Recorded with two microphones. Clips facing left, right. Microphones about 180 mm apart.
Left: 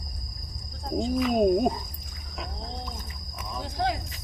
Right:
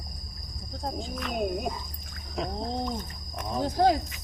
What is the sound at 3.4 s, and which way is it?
Cricket, 40° right (ahead or behind).